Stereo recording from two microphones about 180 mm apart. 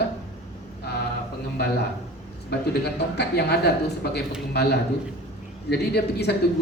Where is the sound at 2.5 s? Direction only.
65° left (ahead or behind).